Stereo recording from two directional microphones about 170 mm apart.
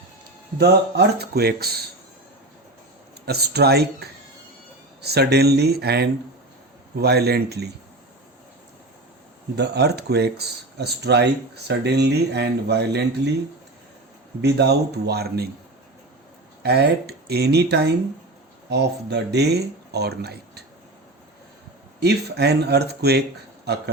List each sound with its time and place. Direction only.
0.6 s speech: 75° right (ahead or behind)
3.2 s speech: 70° right (ahead or behind)
9.6 s speech: 75° right (ahead or behind)
14.4 s speech: 75° right (ahead or behind)
16.6 s speech: 70° right (ahead or behind)
22.0 s speech: 75° right (ahead or behind)